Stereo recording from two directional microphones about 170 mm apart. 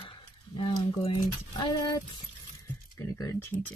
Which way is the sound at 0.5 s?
30° left (ahead or behind).